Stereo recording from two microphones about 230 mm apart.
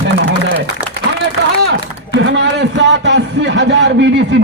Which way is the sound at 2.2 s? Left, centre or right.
Right.